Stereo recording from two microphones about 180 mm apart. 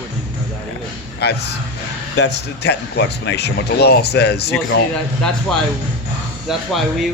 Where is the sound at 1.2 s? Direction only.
65° left (ahead or behind).